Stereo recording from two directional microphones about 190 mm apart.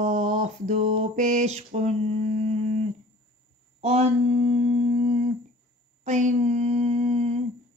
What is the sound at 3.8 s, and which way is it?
Humming, 35° right (ahead or behind).